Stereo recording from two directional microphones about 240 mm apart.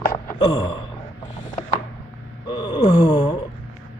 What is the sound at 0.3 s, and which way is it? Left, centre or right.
Speech, centre.